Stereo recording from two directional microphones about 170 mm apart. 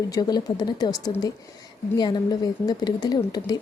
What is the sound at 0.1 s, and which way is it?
Speech, 25° left (ahead or behind).